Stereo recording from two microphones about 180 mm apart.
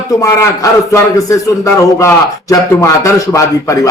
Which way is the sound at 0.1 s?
20° left (ahead or behind).